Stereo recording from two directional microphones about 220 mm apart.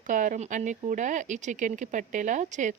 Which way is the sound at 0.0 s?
35° right (ahead or behind).